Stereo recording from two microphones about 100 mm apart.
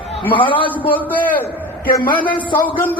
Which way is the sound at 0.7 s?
15° left (ahead or behind).